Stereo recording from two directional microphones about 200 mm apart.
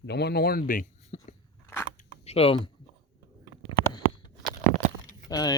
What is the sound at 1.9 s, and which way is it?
Zipper, 30° left (ahead or behind).